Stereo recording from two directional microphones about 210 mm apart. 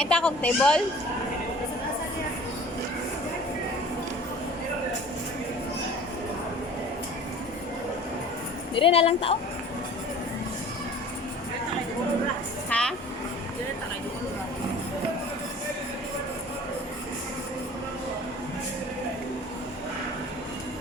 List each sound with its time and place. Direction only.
0.0 s speech: 5° left (ahead or behind)
8.7 s a woman's voice: 25° left (ahead or behind)
12.7 s a sound: 5° left (ahead or behind)